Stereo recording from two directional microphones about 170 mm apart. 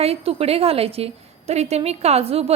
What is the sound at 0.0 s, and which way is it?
A woman's voice, 35° right (ahead or behind).